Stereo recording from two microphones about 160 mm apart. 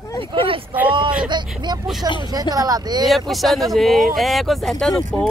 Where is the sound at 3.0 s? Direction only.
Centre (ahead or behind).